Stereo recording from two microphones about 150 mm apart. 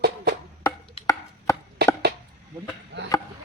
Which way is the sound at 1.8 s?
90° right.